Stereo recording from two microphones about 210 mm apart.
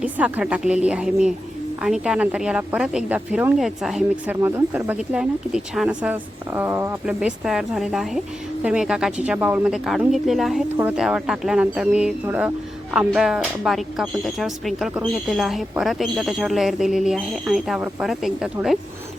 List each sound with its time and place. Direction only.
0.0 s speech: 5° right (ahead or behind)